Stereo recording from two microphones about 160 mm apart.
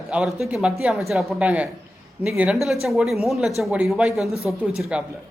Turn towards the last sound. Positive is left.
turn(degrees=-5)  # may be behind; listen again after turning